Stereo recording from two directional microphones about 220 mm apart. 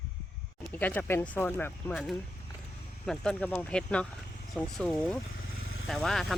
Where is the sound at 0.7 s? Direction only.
5° left (ahead or behind).